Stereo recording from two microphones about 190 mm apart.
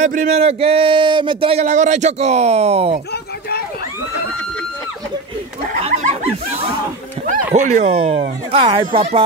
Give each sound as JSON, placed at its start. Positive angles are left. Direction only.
{"t": 0.0, "sound": "speech", "side_deg": -40}
{"t": 7.2, "sound": "speech", "side_deg": -40}